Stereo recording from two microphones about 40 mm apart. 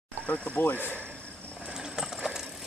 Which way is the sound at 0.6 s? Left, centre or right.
Left.